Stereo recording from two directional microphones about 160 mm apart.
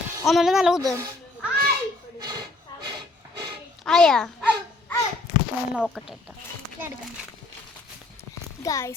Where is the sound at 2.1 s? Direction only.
25° right (ahead or behind).